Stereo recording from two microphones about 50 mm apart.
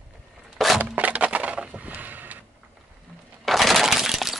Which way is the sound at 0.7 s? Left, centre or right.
Right.